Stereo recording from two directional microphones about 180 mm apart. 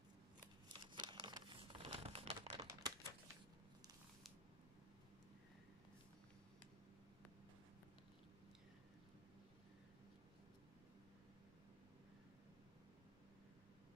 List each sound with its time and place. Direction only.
0.7 s crumpling: 25° right (ahead or behind)
2.6 s typing: 15° right (ahead or behind)